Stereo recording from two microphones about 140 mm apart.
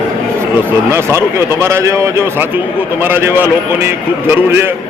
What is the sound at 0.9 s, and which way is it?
A man's voice, 20° right (ahead or behind).